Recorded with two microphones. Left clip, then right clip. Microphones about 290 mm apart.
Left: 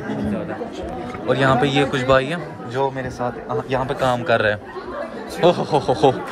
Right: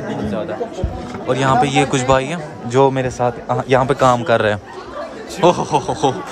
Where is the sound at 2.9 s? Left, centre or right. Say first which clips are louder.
Right 7 dB; right.